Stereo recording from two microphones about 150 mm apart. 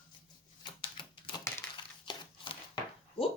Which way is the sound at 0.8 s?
30° left (ahead or behind).